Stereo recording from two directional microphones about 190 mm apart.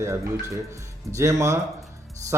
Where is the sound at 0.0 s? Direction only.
15° right (ahead or behind).